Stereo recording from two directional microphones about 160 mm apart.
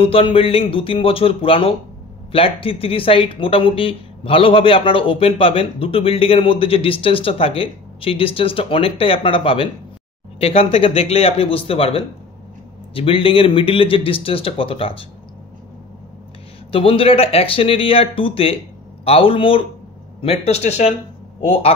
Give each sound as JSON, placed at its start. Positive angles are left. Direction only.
{"t": 0.0, "sound": "speech", "side_deg": 35}
{"t": 16.7, "sound": "speech", "side_deg": 35}